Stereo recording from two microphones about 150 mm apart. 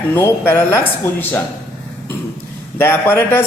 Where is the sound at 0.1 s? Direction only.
15° left (ahead or behind).